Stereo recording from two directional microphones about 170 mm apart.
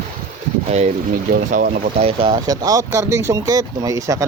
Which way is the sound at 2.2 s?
25° right (ahead or behind).